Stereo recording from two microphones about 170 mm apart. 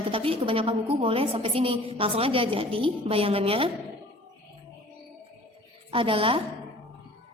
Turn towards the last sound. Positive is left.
turn(degrees=-30)  # may be behind; listen again after turning